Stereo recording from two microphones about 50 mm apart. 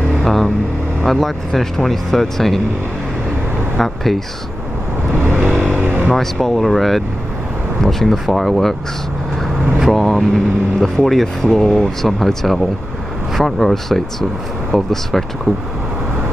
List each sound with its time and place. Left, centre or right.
0.2 s vehicle: centre
1.0 s speech: centre
3.7 s speech: centre
5.1 s vehicle: right
6.1 s speech: centre
9.9 s speech: centre